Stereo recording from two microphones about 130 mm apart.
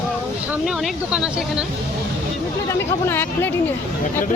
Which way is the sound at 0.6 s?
Centre (ahead or behind).